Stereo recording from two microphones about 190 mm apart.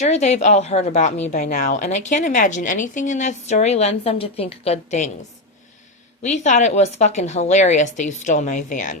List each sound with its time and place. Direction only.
0.0 s a woman's voice: 35° left (ahead or behind)
6.2 s a woman's voice: 40° left (ahead or behind)